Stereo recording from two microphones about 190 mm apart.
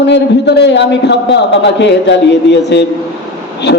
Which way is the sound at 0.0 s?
65° left (ahead or behind).